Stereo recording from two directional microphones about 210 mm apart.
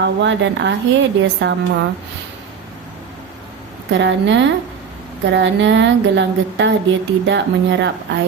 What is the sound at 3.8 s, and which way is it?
A woman's voice, 60° right (ahead or behind).